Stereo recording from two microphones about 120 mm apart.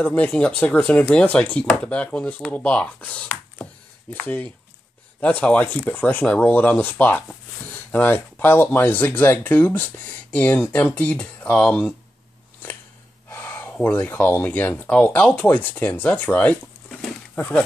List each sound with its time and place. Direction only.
0.0 s speech: 10° left (ahead or behind)
13.3 s speech: 15° left (ahead or behind)